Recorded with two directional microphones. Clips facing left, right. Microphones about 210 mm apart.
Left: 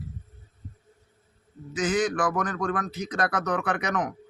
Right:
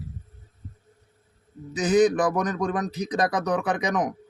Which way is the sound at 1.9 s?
20° right (ahead or behind).